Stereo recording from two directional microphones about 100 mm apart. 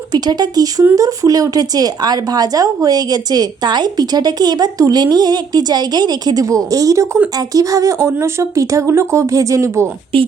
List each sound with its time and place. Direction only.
0.1 s speech: 45° right (ahead or behind); by 9.9 s 25° right (ahead or behind)